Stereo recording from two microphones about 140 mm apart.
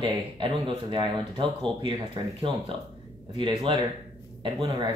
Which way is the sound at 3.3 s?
35° right (ahead or behind).